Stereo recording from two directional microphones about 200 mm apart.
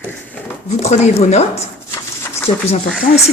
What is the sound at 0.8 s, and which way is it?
Speech, 35° left (ahead or behind).